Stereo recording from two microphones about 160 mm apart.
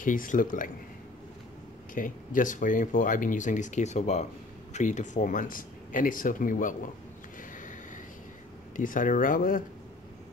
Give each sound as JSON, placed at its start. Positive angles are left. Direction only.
{"t": 0.0, "sound": "speech", "side_deg": 55}
{"t": 2.0, "sound": "speech", "side_deg": 55}
{"t": 8.7, "sound": "speech", "side_deg": 55}